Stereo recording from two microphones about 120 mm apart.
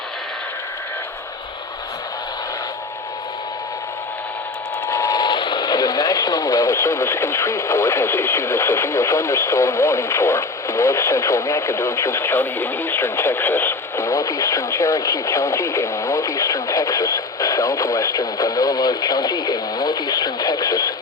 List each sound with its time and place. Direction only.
4.9 s speech: 25° left (ahead or behind)